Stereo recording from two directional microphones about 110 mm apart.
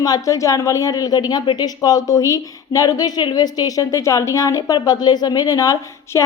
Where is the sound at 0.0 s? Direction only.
30° left (ahead or behind).